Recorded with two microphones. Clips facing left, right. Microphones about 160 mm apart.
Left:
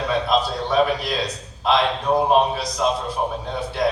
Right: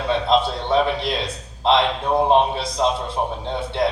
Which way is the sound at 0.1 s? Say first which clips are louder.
Right 3 dB; 25° right (ahead or behind).